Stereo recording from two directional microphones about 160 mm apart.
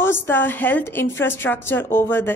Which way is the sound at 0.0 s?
15° left (ahead or behind).